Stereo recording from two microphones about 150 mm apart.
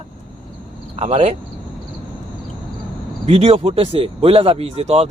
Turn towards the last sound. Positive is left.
turn(degrees=-40)  # may be behind; listen again after turning